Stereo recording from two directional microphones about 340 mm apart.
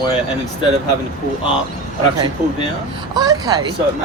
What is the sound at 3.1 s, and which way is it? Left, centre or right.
Speech, centre.